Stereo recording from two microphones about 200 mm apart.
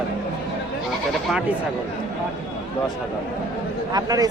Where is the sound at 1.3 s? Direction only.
5° right (ahead or behind).